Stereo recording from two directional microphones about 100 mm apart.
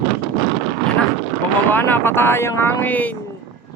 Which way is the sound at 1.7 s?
20° left (ahead or behind).